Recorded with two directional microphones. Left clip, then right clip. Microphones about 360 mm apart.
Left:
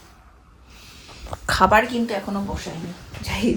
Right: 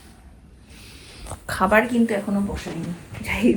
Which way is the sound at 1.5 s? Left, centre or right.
Left.